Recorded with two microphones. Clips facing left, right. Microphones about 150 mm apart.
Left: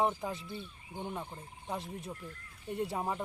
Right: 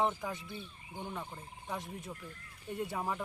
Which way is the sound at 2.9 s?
25° left (ahead or behind).